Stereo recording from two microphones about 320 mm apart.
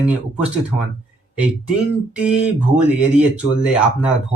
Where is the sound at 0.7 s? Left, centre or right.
Left.